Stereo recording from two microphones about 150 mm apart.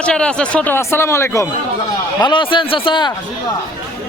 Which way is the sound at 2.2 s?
30° left (ahead or behind).